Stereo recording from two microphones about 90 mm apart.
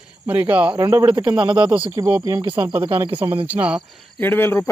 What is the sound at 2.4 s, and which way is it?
Speech, 60° right (ahead or behind).